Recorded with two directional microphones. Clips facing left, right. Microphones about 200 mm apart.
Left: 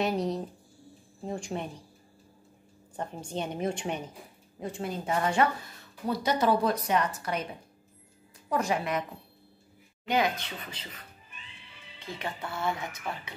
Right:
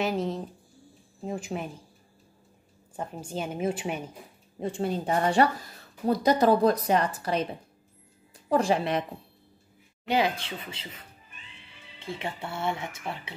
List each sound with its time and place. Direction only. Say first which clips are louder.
0.0 s a woman's voice: even; centre (ahead or behind)
3.0 s a woman's voice: right 1 dB; 5° right (ahead or behind)
4.6 s a woman's voice: right 5 dB; 30° right (ahead or behind)
8.5 s a woman's voice: right 5 dB; 30° right (ahead or behind)
10.0 s speech: right 2 dB; 30° right (ahead or behind)